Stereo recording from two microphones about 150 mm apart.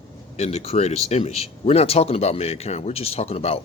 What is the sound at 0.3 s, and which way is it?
Speech, 45° left (ahead or behind).